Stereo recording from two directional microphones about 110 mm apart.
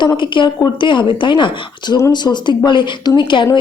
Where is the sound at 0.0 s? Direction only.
45° left (ahead or behind).